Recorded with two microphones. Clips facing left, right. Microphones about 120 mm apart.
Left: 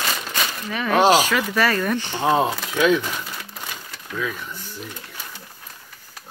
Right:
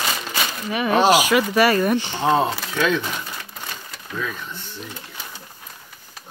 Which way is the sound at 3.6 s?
5° left (ahead or behind).